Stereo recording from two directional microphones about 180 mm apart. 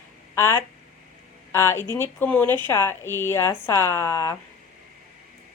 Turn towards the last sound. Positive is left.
turn(degrees=15)  # may be behind; listen again after turning